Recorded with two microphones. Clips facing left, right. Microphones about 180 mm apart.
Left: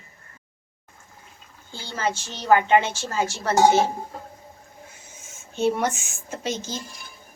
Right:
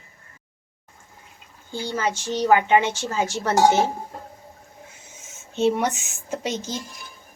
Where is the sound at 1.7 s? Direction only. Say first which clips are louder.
Right 2 dB; 15° right (ahead or behind).